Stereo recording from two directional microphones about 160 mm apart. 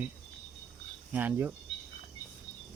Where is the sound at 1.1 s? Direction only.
10° right (ahead or behind).